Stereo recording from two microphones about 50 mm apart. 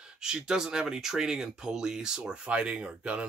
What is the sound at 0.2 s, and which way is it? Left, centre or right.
Speech, centre.